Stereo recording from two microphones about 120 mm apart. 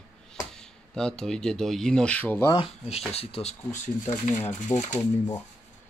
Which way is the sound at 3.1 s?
55° left (ahead or behind).